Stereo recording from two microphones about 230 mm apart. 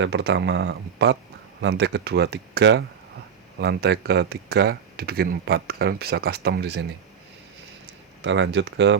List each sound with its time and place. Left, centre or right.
0.0 s speech: right
8.2 s speech: right